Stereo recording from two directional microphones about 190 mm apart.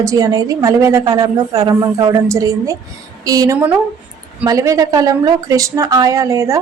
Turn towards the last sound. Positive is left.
turn(degrees=-15)  # may be behind; listen again after turning